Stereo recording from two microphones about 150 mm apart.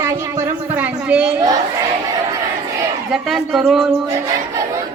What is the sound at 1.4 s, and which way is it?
Speech, 25° right (ahead or behind).